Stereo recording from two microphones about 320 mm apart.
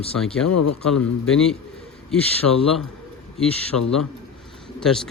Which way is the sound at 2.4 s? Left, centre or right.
Left.